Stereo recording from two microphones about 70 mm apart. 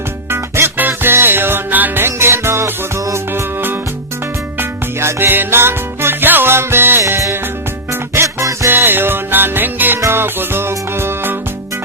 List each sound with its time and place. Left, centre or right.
0.3 s music: right
7.1 s music: right
8.7 s music: right